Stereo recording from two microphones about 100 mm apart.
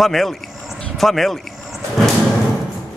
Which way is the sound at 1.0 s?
Centre (ahead or behind).